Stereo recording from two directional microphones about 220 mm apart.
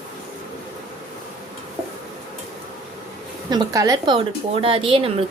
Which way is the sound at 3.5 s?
15° right (ahead or behind).